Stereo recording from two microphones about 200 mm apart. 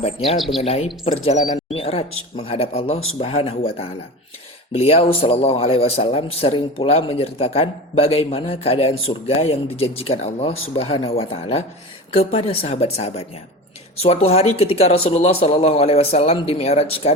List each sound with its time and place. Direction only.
0.3 s speech: centre (ahead or behind)
0.6 s a man's voice: 30° left (ahead or behind)
4.7 s a man's voice: 30° left (ahead or behind)
14.3 s a man's voice: 30° left (ahead or behind)